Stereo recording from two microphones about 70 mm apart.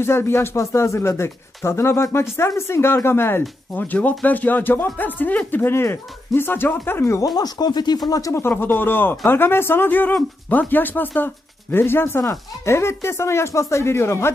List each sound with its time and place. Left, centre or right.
0.0 s speech: left
7.3 s speech: left
8.1 s speech: left
8.4 s speech: left